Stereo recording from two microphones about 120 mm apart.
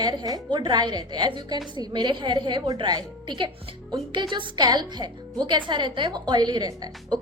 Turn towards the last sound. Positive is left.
turn(degrees=-35)  # may be behind; listen again after turning